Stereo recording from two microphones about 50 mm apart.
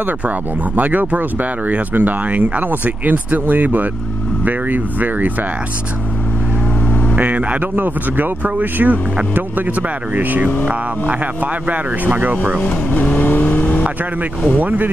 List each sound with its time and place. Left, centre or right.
0.7 s speech: right
7.2 s speech: right
11.7 s speech: right
13.0 s vehicle: left
14.6 s speech: right